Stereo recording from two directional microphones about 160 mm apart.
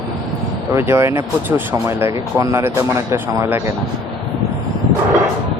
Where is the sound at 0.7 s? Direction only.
15° right (ahead or behind).